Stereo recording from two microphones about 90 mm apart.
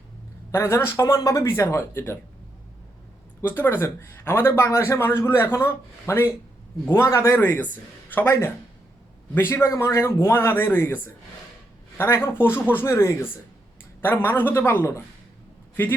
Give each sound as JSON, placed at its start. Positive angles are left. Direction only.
{"t": 0.5, "sound": "speech", "side_deg": 30}
{"t": 3.4, "sound": "a man's voice", "side_deg": 20}